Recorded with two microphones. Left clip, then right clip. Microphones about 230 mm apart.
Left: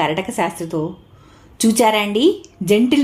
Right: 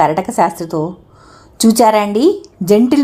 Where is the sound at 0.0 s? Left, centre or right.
Right.